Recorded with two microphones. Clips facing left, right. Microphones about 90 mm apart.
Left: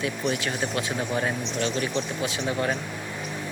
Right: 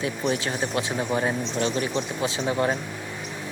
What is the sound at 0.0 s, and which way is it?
Speech, 25° right (ahead or behind).